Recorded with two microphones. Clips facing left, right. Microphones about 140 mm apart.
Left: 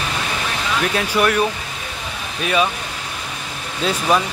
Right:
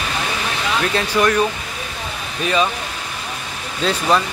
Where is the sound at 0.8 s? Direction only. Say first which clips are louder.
Even; 5° left (ahead or behind).